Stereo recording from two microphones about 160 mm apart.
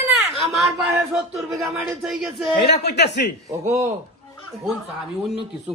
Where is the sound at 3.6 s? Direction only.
45° right (ahead or behind).